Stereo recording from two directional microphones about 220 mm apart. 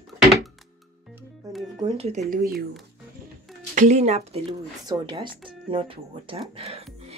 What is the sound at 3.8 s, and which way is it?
Speech, 30° right (ahead or behind).